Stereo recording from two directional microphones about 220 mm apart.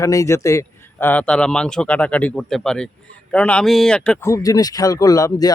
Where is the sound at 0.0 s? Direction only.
15° left (ahead or behind).